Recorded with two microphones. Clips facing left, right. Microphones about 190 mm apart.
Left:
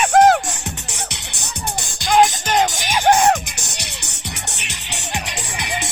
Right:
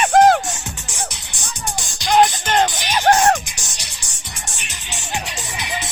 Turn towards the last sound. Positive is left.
turn(degrees=65)  # may be behind; listen again after turning